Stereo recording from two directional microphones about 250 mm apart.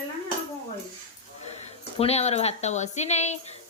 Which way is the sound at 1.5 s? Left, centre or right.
Left.